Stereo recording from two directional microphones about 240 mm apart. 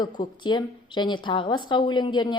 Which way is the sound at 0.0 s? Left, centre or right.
Centre.